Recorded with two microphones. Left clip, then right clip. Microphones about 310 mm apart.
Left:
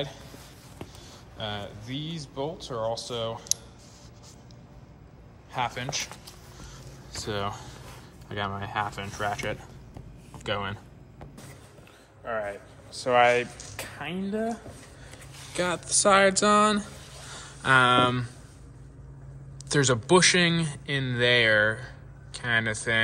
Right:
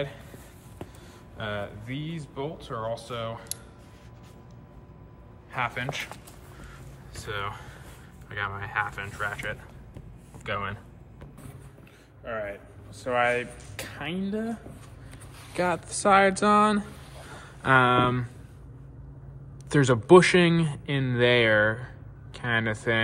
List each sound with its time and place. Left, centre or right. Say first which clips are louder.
1.4 s speech: right 2 dB; centre
5.5 s speech: even; centre
7.2 s speech: left 2 dB; centre
12.3 s speech: left 2 dB; centre
12.9 s speech: left 4 dB; left
13.7 s speech: right 1 dB; centre
15.5 s speech: even; centre
19.7 s speech: right 4 dB; centre